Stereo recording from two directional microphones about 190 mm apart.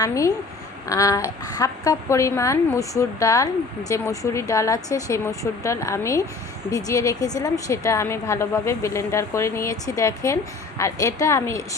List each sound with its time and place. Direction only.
0.0 s a woman's voice: 20° left (ahead or behind)